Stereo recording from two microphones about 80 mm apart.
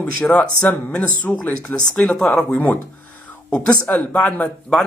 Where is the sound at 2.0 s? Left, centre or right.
Centre.